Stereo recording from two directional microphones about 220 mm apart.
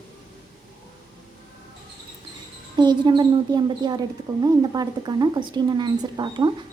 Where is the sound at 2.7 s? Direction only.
20° right (ahead or behind).